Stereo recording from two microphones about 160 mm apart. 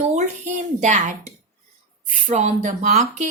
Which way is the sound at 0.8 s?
50° right (ahead or behind).